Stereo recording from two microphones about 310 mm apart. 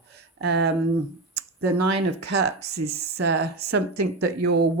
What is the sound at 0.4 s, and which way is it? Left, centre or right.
Speech, right.